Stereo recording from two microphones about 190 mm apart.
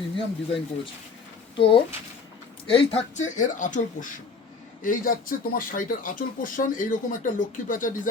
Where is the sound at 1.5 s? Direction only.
25° left (ahead or behind).